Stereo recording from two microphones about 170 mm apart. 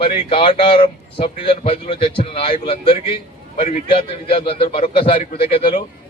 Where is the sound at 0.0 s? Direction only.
30° left (ahead or behind).